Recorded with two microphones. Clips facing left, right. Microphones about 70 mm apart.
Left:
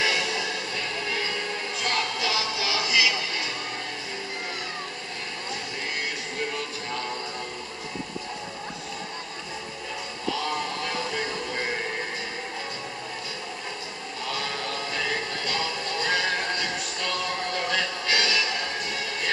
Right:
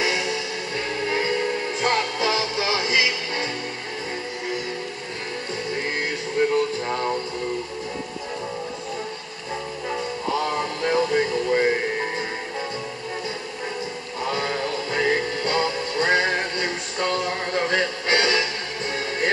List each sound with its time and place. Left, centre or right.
0.7 s music: right
6.4 s music: right
10.9 s a sound: right
15.0 s music: right